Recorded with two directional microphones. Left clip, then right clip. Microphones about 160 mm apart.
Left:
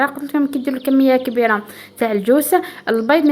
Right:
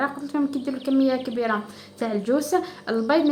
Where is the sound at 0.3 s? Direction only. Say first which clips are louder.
Left 7 dB; 50° left (ahead or behind).